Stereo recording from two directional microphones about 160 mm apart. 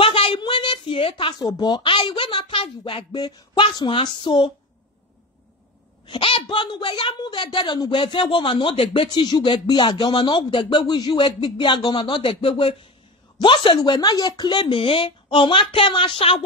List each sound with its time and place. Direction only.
0.0 s speech: 35° left (ahead or behind)
6.0 s a woman's voice: 35° left (ahead or behind)